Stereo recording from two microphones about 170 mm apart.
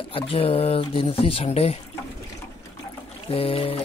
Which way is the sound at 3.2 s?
35° left (ahead or behind).